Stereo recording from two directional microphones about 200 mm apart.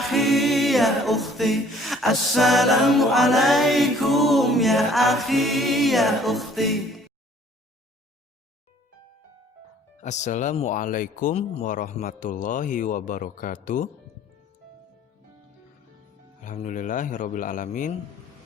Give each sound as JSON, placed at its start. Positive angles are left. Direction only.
{"t": 0.0, "sound": "music", "side_deg": 0}
{"t": 10.0, "sound": "speech", "side_deg": 35}
{"t": 16.4, "sound": "speech", "side_deg": 40}